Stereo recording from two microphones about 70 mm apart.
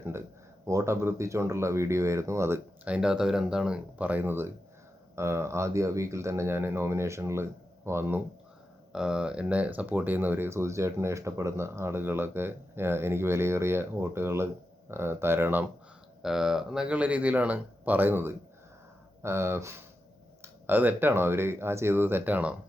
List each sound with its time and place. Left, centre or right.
0.0 s speech: right
2.8 s speech: centre
4.0 s speech: right
8.9 s speech: centre; by 15.6 s right
16.2 s speech: centre; by 19.7 s right
20.4 s speech: right